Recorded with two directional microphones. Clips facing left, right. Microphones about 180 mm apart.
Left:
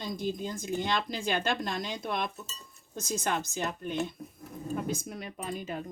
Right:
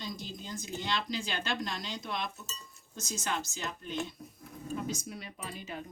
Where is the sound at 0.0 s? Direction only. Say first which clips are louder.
Left 8 dB; 50° left (ahead or behind).